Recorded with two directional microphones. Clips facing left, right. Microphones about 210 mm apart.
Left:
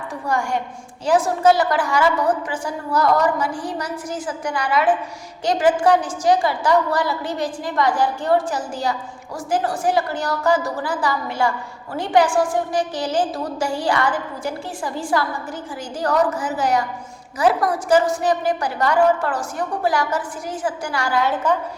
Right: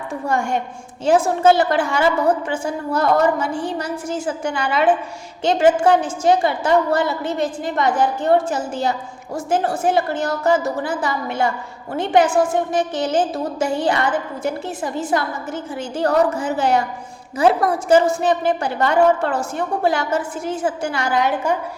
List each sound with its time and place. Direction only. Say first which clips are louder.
0.3 s a woman's voice: right 1 dB; 25° right (ahead or behind)